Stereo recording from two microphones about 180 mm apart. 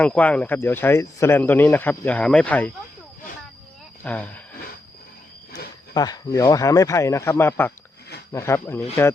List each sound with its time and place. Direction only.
0.0 s speech: 10° left (ahead or behind)
4.0 s speech: 5° left (ahead or behind)
5.9 s speech: 20° left (ahead or behind)